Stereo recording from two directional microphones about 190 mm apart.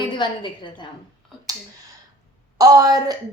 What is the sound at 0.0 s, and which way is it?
Speech, 25° left (ahead or behind).